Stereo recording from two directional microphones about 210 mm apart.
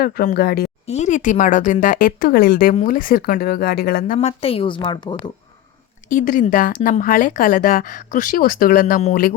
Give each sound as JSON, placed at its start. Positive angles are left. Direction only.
{"t": 0.0, "sound": "speech", "side_deg": 45}
{"t": 0.9, "sound": "speech", "side_deg": 35}
{"t": 4.2, "sound": "speech", "side_deg": 30}
{"t": 6.1, "sound": "speech", "side_deg": 40}